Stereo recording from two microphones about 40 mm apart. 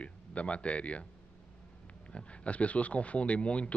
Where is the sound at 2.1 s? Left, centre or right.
Left.